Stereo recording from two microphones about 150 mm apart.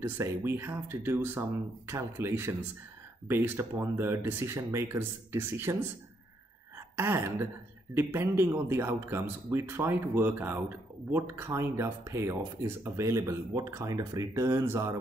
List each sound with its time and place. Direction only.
0.0 s speech: 15° right (ahead or behind)
7.0 s speech: 15° right (ahead or behind)